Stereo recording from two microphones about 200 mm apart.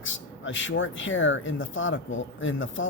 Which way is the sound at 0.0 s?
70° left (ahead or behind).